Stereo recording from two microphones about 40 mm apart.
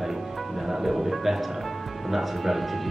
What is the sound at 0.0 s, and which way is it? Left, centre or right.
Music, centre.